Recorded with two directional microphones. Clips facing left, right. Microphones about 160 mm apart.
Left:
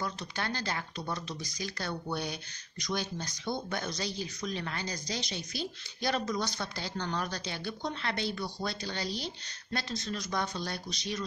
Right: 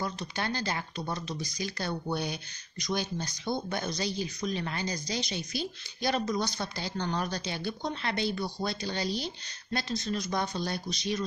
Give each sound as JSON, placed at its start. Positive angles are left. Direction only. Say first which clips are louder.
{"t": 0.0, "sound": "speech", "louder": "right 2 dB", "side_deg": -15}